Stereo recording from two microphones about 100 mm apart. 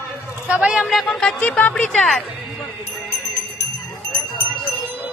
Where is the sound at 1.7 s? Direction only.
5° left (ahead or behind).